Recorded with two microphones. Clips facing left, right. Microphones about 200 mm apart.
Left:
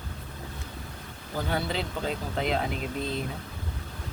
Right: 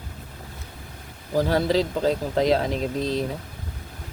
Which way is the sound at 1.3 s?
40° right (ahead or behind).